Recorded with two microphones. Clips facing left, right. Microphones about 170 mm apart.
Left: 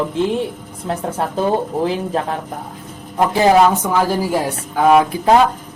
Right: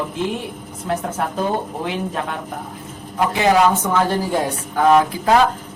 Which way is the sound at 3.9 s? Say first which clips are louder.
Left 2 dB; 5° left (ahead or behind).